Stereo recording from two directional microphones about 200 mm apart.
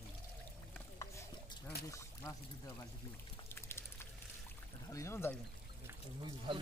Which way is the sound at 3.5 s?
15° left (ahead or behind).